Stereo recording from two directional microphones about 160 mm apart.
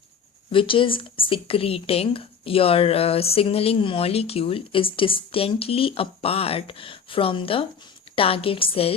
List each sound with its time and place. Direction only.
0.5 s a woman's voice: 35° left (ahead or behind)